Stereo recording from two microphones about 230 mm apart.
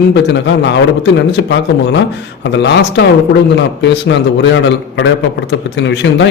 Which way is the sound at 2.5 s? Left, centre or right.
Left.